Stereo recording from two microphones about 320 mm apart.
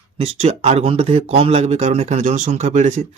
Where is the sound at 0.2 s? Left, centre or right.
Centre.